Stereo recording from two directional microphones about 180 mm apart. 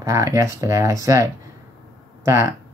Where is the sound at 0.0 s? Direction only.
15° right (ahead or behind).